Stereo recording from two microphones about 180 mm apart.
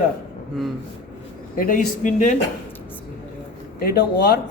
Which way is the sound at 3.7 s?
55° left (ahead or behind).